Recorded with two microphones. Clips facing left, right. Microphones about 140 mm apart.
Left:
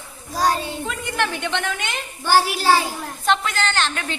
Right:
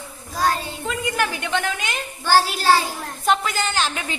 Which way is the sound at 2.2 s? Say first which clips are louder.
Even; 15° left (ahead or behind).